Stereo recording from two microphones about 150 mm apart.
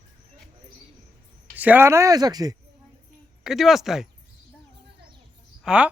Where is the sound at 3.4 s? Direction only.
Centre (ahead or behind).